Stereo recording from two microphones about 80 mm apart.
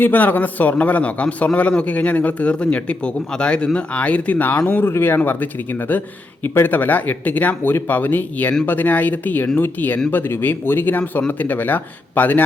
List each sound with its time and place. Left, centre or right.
0.0 s a man's voice: left
4.9 s speech: left